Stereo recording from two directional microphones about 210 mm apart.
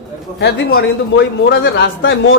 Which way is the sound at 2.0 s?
65° left (ahead or behind).